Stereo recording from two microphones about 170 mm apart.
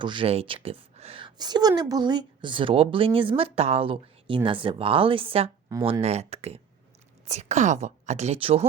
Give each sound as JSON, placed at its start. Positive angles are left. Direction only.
{"t": 0.0, "sound": "a woman's voice", "side_deg": -30}